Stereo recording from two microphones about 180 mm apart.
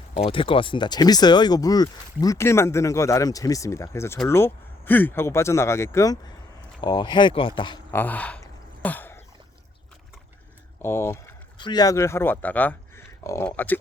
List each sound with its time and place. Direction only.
0.3 s speech: 30° left (ahead or behind)
7.9 s speech: 10° left (ahead or behind)
8.8 s throat clearing: 10° left (ahead or behind)
10.8 s speech: 15° left (ahead or behind)
11.5 s speech: 25° left (ahead or behind)